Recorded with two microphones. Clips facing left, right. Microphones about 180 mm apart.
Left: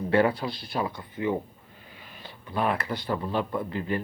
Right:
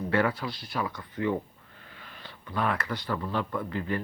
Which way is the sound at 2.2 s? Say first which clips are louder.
Left 2 dB; 15° left (ahead or behind).